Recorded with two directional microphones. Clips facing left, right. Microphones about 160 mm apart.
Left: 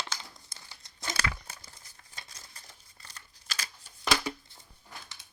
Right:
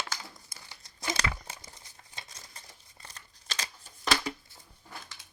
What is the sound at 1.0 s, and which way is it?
Crumpling, 20° right (ahead or behind).